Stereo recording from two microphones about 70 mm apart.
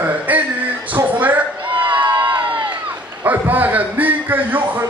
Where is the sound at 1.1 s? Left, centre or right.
Right.